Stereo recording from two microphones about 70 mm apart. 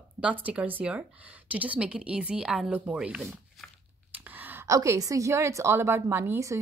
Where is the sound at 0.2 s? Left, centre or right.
Centre.